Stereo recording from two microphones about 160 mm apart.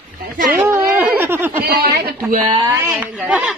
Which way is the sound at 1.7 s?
75° right (ahead or behind).